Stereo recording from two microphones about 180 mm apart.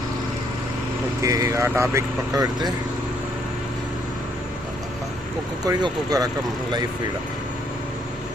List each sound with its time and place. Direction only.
1.2 s speech: 20° right (ahead or behind)
5.6 s speech: 20° right (ahead or behind)